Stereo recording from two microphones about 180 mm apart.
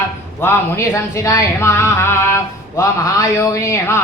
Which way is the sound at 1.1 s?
20° left (ahead or behind).